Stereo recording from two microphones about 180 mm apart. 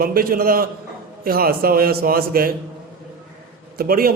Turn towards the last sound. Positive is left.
turn(degrees=-55)  # may be behind; listen again after turning